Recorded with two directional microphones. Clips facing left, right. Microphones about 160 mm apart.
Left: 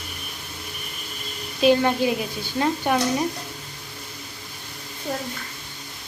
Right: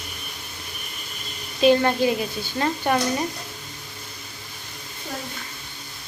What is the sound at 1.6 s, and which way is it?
A woman's voice, 5° left (ahead or behind).